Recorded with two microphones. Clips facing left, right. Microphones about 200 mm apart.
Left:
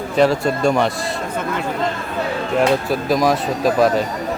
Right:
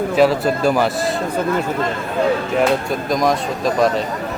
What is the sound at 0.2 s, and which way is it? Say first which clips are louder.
Speech: even; 5° right (ahead or behind).